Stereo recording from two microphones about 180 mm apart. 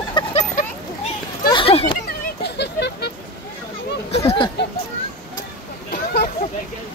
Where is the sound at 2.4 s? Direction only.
70° left (ahead or behind).